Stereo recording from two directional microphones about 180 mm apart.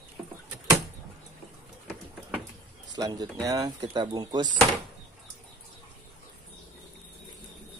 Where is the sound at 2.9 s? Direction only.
20° right (ahead or behind).